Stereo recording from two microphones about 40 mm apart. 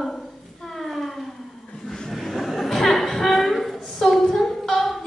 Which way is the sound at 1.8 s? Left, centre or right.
Centre.